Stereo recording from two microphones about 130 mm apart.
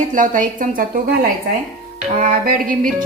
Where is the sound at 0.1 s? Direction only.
80° right.